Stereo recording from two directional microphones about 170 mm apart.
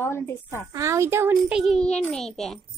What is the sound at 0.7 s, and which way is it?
Speech, 15° right (ahead or behind).